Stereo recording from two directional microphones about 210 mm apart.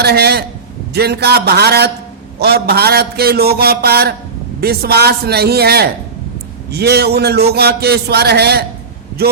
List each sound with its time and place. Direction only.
0.0 s a man's voice: 50° right (ahead or behind)